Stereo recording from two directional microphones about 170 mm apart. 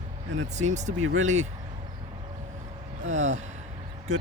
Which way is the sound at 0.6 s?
45° right (ahead or behind).